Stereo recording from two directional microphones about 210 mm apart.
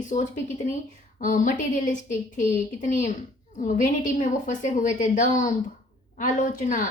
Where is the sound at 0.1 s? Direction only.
35° left (ahead or behind).